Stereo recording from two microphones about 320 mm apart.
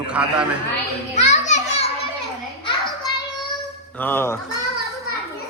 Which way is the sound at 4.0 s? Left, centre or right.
Centre.